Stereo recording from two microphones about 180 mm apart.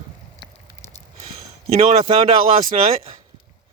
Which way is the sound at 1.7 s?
35° right (ahead or behind).